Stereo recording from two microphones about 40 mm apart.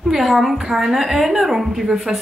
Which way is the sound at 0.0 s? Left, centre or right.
Centre.